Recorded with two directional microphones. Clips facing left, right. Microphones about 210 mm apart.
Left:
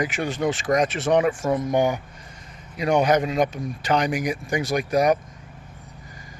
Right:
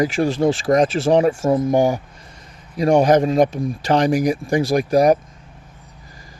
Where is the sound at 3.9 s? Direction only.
30° right (ahead or behind).